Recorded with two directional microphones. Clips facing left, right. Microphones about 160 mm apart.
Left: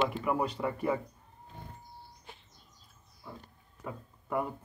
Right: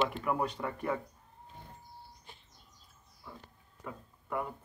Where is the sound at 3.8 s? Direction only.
15° left (ahead or behind).